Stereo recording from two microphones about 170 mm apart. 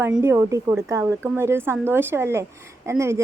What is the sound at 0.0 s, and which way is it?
A woman's voice, 15° right (ahead or behind).